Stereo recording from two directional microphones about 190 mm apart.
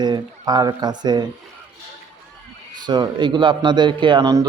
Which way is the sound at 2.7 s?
20° right (ahead or behind).